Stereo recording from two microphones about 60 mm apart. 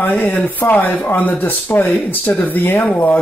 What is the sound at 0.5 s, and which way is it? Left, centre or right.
Speech, left.